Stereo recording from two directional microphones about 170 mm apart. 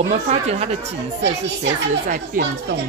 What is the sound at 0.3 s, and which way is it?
Speech, 40° right (ahead or behind).